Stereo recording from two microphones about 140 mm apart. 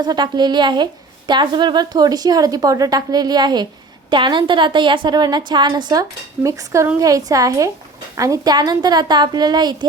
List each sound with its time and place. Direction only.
0.0 s a woman's voice: 30° right (ahead or behind)